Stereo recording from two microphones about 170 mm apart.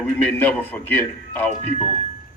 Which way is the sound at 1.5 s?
40° left (ahead or behind).